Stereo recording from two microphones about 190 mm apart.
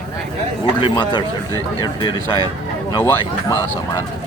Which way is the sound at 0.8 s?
25° left (ahead or behind).